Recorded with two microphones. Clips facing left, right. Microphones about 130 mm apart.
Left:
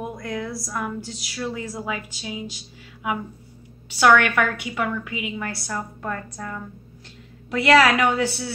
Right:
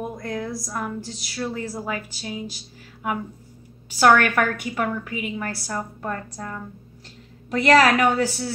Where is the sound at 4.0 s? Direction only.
40° right (ahead or behind).